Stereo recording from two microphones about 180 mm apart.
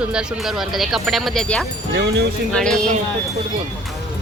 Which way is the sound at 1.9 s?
70° right (ahead or behind).